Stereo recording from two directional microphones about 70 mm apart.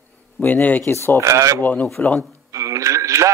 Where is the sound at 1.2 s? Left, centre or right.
Right.